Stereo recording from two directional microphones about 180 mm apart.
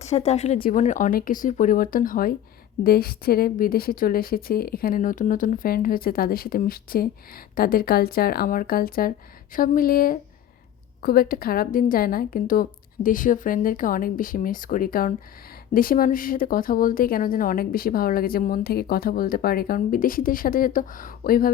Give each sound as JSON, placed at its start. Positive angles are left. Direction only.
{"t": 0.0, "sound": "a woman's voice", "side_deg": 40}